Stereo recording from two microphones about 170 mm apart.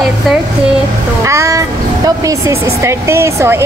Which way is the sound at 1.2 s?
20° right (ahead or behind).